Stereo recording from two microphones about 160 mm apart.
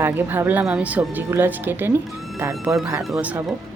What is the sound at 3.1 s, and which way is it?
Speech, 15° right (ahead or behind).